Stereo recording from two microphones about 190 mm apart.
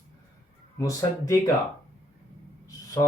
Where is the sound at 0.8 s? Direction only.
20° left (ahead or behind).